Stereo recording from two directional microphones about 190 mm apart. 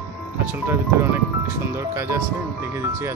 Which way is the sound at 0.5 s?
10° right (ahead or behind).